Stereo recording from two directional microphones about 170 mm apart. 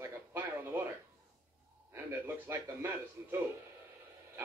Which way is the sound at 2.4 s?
15° right (ahead or behind).